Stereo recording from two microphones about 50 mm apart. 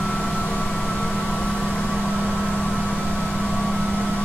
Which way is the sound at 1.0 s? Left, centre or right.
Left.